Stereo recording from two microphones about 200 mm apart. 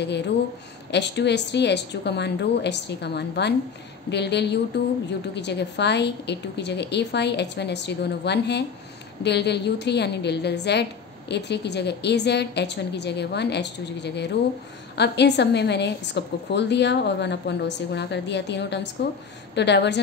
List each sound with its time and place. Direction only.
0.9 s a woman's voice: 60° left (ahead or behind)